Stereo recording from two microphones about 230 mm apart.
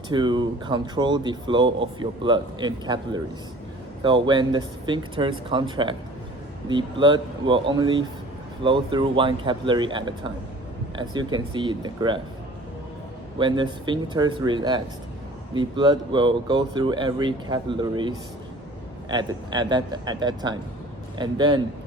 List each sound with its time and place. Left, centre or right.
0.1 s speech: centre
13.4 s speech: centre